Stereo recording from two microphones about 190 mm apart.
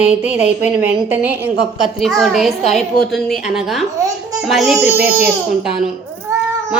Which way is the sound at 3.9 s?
15° right (ahead or behind).